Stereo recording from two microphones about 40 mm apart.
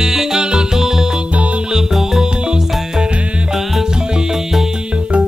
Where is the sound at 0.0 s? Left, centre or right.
Centre.